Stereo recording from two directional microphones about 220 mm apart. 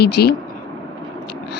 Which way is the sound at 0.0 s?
45° left (ahead or behind).